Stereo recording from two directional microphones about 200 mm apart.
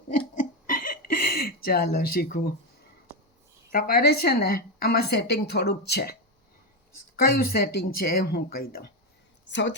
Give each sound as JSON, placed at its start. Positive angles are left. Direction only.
{"t": 0.1, "sound": "hiccup", "side_deg": 40}
{"t": 3.7, "sound": "a woman's voice", "side_deg": 45}
{"t": 7.2, "sound": "a woman's voice", "side_deg": 45}
{"t": 9.5, "sound": "a woman's voice", "side_deg": 65}